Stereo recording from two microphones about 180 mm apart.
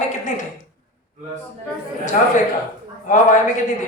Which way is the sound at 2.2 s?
45° left (ahead or behind).